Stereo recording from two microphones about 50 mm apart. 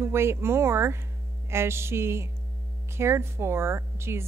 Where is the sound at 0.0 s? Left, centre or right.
Right.